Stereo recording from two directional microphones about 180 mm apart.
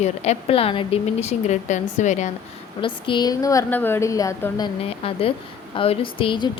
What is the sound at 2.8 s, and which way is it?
Speech, 30° left (ahead or behind).